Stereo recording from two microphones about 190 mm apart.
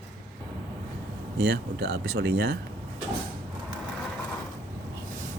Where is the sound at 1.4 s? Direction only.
60° right (ahead or behind).